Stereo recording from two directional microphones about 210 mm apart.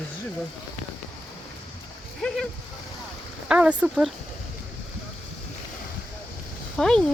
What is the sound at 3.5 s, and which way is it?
Speech, 5° right (ahead or behind).